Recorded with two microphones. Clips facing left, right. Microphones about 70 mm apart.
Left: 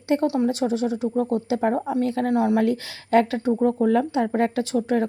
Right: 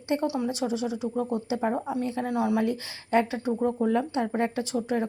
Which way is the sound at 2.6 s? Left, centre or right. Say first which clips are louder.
Left 5 dB; left.